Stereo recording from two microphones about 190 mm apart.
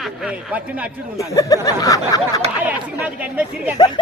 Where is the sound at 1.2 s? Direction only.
15° left (ahead or behind).